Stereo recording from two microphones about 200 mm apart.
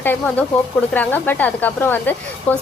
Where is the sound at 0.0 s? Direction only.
10° left (ahead or behind).